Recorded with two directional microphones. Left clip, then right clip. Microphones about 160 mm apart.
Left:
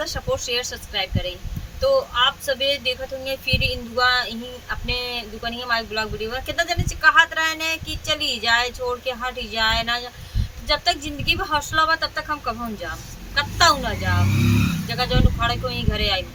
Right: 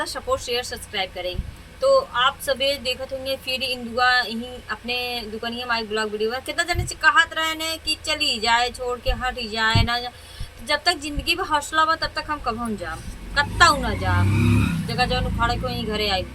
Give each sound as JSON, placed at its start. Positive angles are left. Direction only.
{"t": 0.0, "sound": "speech", "side_deg": -30}